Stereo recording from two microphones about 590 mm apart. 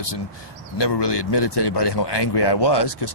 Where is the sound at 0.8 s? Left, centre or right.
Left.